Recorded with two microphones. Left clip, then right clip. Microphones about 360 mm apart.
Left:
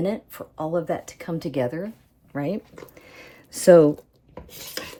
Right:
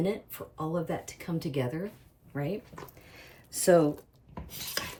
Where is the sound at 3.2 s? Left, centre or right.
Left.